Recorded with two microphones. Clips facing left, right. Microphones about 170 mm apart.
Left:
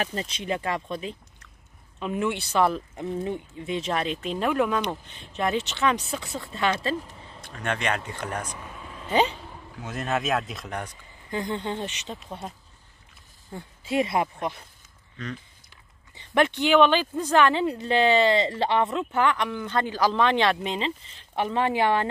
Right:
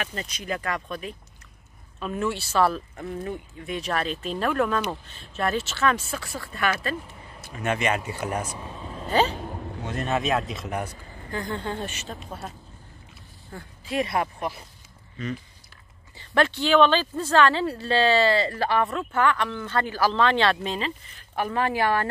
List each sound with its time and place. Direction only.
0.0 s speech: 30° left (ahead or behind)
7.0 s speech: 5° right (ahead or behind)
8.5 s a sound: 30° right (ahead or behind)
9.3 s a sound: 50° right (ahead or behind)
9.8 s speech: centre (ahead or behind)
11.2 s speech: 20° left (ahead or behind)
13.5 s speech: 20° left (ahead or behind)
15.2 s speech: 5° right (ahead or behind)
16.2 s a woman's voice: 20° left (ahead or behind)